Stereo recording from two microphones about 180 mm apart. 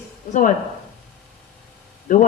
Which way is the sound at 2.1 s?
45° left (ahead or behind).